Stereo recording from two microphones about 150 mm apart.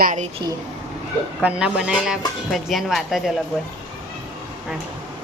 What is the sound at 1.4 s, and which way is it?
Speech, 5° right (ahead or behind).